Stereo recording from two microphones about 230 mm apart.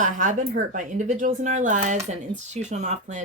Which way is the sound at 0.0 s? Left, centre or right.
Right.